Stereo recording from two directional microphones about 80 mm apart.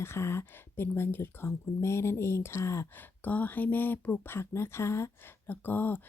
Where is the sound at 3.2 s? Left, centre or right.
Left.